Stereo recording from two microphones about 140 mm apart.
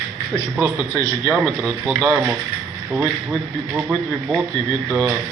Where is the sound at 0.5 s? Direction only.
10° right (ahead or behind).